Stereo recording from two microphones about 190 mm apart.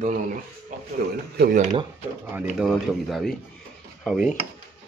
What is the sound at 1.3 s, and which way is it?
Speech, 60° right (ahead or behind).